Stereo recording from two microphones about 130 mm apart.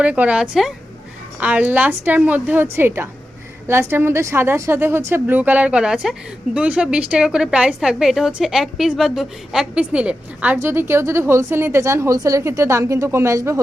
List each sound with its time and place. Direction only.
0.0 s a woman's voice: 10° right (ahead or behind)